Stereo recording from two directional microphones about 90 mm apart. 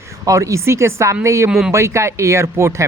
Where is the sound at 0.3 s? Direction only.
35° right (ahead or behind).